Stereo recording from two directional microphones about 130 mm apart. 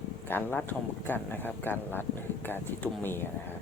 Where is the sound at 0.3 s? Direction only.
15° left (ahead or behind).